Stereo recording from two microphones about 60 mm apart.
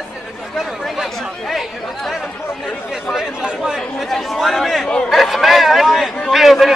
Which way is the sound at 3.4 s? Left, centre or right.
Centre.